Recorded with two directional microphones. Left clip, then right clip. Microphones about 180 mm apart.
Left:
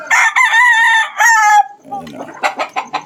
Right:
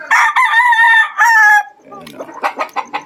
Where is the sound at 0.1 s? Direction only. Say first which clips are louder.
Even; 20° left (ahead or behind).